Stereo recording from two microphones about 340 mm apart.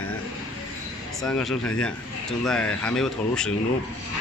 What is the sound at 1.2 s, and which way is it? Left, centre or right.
Speech, centre.